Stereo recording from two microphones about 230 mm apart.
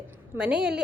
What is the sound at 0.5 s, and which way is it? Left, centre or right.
Speech, right.